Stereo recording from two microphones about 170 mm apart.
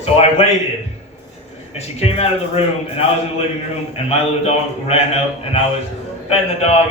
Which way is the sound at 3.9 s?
35° left (ahead or behind).